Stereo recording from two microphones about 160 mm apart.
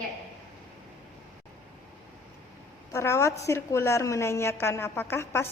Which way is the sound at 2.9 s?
20° left (ahead or behind).